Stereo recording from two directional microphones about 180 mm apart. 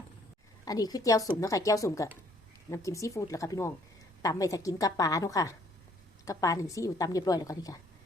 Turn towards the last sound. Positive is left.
turn(degrees=20)  # may be behind; listen again after turning